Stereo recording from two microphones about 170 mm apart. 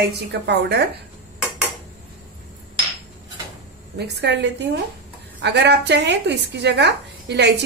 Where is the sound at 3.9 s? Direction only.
80° right.